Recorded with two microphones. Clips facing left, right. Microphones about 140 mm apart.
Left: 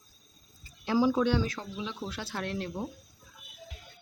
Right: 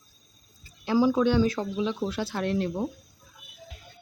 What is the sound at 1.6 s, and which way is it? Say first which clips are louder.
Speech: right 10 dB; 65° right (ahead or behind).